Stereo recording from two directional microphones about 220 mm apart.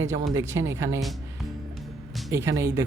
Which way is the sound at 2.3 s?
10° right (ahead or behind).